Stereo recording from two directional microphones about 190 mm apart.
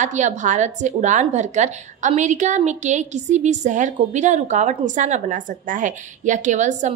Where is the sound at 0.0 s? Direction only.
40° right (ahead or behind).